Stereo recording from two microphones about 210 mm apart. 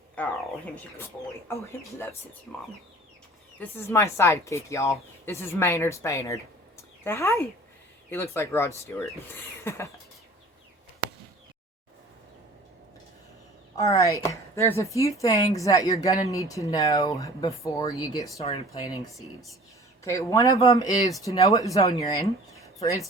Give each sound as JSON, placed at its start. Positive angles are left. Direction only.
{"t": 0.2, "sound": "bird", "side_deg": 5}
{"t": 1.5, "sound": "speech", "side_deg": 10}
{"t": 3.6, "sound": "speech", "side_deg": 10}
{"t": 13.8, "sound": "speech", "side_deg": 15}
{"t": 18.4, "sound": "speech", "side_deg": 30}
{"t": 20.1, "sound": "speech", "side_deg": 15}